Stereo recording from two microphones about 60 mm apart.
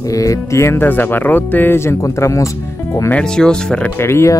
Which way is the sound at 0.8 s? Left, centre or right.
Left.